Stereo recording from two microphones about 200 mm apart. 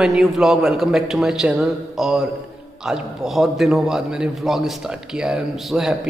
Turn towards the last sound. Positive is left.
turn(degrees=0)  # may be behind; listen again after turning